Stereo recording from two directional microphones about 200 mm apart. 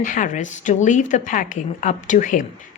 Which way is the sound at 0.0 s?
40° left (ahead or behind).